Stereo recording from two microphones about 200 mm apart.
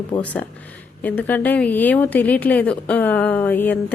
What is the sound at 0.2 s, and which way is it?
A woman's voice, 5° left (ahead or behind).